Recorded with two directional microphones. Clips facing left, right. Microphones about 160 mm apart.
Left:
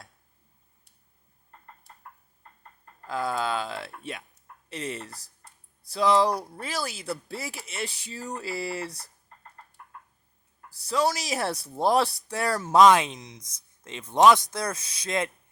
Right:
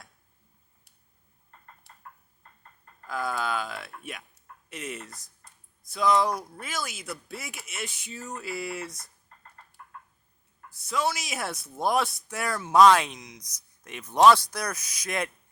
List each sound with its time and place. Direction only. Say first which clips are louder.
3.1 s speech: left 2 dB; 30° left (ahead or behind)
10.7 s speech: left 3 dB; 35° left (ahead or behind)
12.7 s speech: even; 20° left (ahead or behind)